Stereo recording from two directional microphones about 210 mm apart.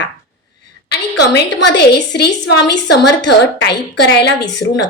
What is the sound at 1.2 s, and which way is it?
A woman's voice, 55° left (ahead or behind).